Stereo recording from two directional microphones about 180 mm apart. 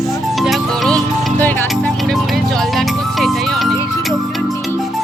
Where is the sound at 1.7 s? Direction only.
Centre (ahead or behind).